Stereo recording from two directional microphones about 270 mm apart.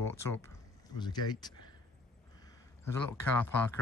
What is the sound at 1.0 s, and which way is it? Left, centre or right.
Speech, centre.